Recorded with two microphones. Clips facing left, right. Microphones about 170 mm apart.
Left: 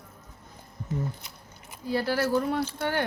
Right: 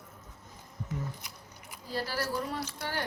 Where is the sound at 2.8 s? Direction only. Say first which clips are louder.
Left 6 dB; 55° left (ahead or behind).